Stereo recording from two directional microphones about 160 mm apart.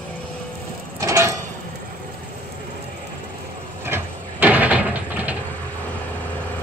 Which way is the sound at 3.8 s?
15° right (ahead or behind).